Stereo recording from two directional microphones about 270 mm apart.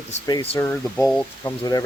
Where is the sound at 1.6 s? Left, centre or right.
Centre.